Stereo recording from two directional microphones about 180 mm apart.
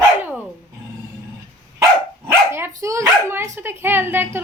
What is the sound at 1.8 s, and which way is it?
Speech, 15° right (ahead or behind).